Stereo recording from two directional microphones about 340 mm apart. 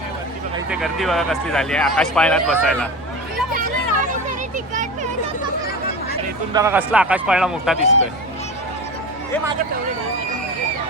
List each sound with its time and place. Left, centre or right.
0.5 s speech: centre
3.5 s a sound: right
6.5 s speech: centre